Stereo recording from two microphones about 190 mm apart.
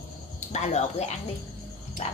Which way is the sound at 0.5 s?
35° left (ahead or behind).